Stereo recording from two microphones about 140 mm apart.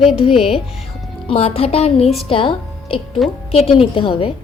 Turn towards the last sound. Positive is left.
turn(degrees=40)  # may be behind; listen again after turning